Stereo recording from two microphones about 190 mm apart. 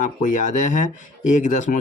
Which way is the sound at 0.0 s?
40° left (ahead or behind).